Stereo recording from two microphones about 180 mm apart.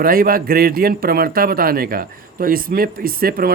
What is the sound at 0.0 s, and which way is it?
A man's voice, 55° right (ahead or behind).